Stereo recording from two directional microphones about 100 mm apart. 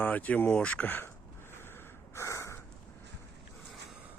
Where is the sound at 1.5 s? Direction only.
25° left (ahead or behind).